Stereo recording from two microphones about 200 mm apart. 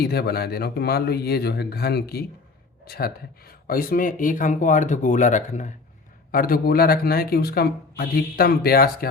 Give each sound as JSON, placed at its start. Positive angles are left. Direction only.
{"t": 0.0, "sound": "speech", "side_deg": 55}